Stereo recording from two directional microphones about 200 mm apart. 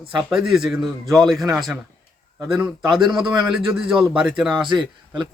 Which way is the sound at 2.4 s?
10° right (ahead or behind).